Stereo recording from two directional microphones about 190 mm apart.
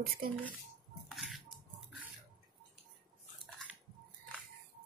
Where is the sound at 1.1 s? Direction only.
Centre (ahead or behind).